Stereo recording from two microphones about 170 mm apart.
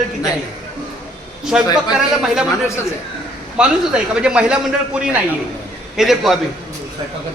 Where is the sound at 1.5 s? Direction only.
5° right (ahead or behind).